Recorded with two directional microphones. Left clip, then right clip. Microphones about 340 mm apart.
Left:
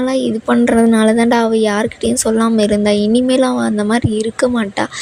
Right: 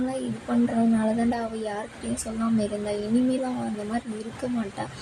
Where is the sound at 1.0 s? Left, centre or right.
Left.